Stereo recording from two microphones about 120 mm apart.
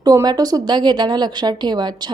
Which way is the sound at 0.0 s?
30° right (ahead or behind).